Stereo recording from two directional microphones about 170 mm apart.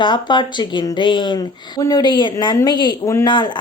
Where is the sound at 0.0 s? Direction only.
25° left (ahead or behind).